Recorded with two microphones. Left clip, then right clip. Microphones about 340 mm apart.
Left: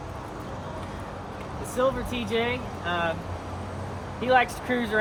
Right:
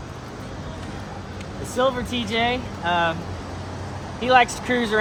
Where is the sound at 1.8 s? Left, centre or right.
Centre.